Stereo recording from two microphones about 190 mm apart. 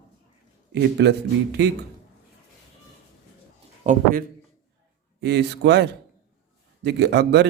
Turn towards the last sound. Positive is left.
turn(degrees=-65)  # may be behind; listen again after turning